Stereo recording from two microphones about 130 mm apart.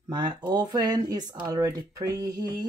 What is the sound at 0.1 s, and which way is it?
Speech, 35° right (ahead or behind).